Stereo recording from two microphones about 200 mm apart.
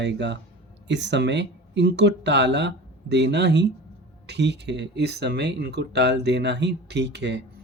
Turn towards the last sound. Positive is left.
turn(degrees=-55)  # may be behind; listen again after turning